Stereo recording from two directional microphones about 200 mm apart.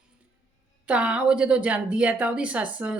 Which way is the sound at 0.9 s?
5° right (ahead or behind).